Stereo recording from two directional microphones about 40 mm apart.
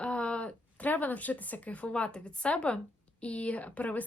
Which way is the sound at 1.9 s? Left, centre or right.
Left.